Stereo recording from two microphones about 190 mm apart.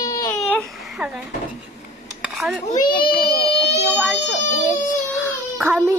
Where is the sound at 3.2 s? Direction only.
60° left (ahead or behind).